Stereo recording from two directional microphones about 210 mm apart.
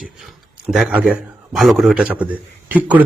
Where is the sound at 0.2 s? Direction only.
Centre (ahead or behind).